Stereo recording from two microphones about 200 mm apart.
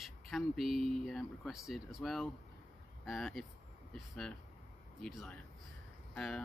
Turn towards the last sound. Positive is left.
turn(degrees=5)  # may be behind; listen again after turning